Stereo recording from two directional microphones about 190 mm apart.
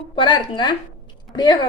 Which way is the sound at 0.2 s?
25° left (ahead or behind).